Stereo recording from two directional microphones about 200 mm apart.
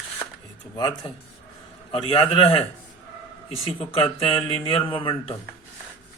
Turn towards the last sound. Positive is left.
turn(degrees=25)  # may be behind; listen again after turning